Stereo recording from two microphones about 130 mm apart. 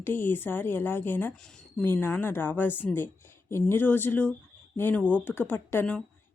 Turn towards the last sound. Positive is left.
turn(degrees=15)  # may be behind; listen again after turning